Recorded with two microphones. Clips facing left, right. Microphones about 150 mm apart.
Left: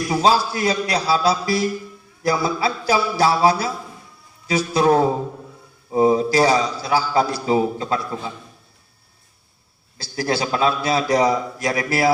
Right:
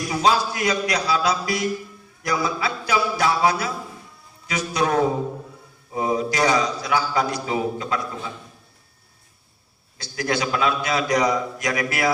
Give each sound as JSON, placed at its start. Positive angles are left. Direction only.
{"t": 0.1, "sound": "a man's voice", "side_deg": 30}
{"t": 10.0, "sound": "a man's voice", "side_deg": 30}